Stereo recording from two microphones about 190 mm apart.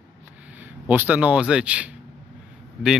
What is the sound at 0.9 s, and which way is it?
Speech, 10° right (ahead or behind).